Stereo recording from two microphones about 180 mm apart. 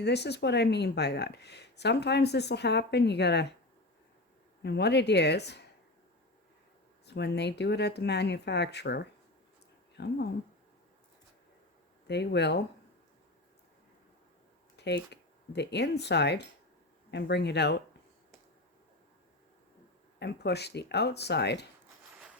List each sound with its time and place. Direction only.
0.0 s speech: 70° left (ahead or behind)
4.6 s speech: 70° left (ahead or behind)
7.0 s speech: 70° left (ahead or behind)
12.0 s speech: 70° left (ahead or behind)
14.8 s speech: 70° left (ahead or behind)
20.1 s speech: 70° left (ahead or behind)